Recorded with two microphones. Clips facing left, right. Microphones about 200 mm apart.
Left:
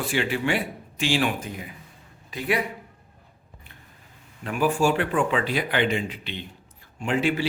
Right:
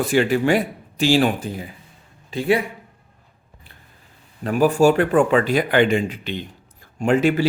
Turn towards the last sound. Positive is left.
turn(degrees=-45)  # may be behind; listen again after turning